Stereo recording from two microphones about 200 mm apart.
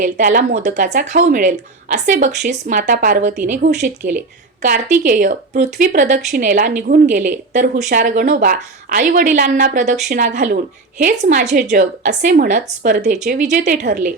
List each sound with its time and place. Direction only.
0.0 s speech: 40° right (ahead or behind)